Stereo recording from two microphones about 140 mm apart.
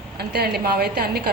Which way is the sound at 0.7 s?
90° right.